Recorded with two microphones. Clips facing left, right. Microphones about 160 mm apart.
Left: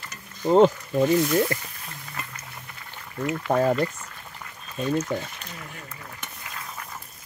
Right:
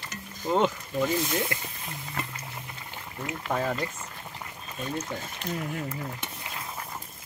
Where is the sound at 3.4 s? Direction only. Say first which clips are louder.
Left 7 dB; 45° left (ahead or behind).